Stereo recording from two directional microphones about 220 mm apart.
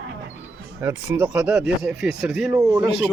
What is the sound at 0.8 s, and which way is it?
Speech, 10° right (ahead or behind).